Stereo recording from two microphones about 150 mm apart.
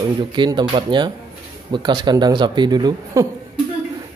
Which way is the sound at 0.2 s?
30° right (ahead or behind).